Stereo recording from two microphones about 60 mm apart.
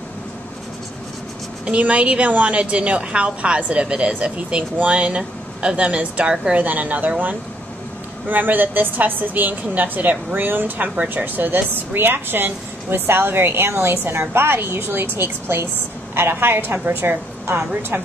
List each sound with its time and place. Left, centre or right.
1.7 s a woman's voice: right
6.6 s a woman's voice: right